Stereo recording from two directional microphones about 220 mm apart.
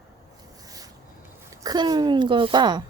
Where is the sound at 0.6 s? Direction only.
15° right (ahead or behind).